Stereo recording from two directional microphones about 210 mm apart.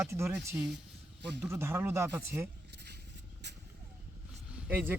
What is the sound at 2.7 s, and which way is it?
Vehicle, 50° right (ahead or behind).